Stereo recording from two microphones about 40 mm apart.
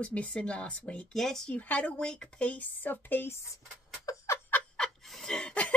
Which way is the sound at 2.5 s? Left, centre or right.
Left.